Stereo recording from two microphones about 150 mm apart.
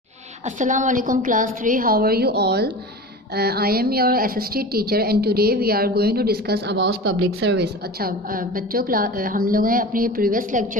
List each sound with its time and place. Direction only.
0.6 s a woman's voice: 55° right (ahead or behind)